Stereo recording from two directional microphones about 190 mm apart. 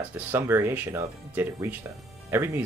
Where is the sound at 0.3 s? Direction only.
10° right (ahead or behind).